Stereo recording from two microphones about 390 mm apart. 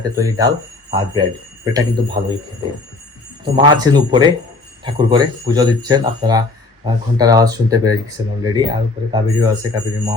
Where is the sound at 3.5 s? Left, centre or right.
Centre.